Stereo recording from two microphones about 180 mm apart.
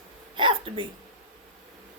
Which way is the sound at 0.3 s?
25° right (ahead or behind).